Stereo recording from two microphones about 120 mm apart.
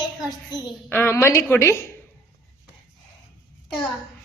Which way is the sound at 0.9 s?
20° left (ahead or behind).